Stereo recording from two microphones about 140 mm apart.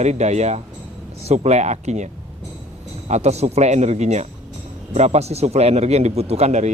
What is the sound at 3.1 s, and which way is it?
Speech, 50° right (ahead or behind).